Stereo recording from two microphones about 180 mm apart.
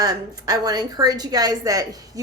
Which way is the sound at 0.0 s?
20° right (ahead or behind).